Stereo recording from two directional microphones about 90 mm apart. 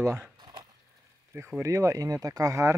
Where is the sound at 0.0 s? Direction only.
30° right (ahead or behind).